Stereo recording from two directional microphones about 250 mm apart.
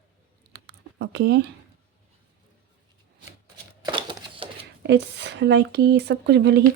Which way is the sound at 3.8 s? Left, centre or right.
Centre.